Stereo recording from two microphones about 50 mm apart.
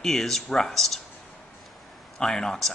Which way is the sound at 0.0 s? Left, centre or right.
Centre.